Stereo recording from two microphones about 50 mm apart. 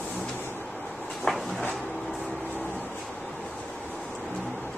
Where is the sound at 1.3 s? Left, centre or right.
Centre.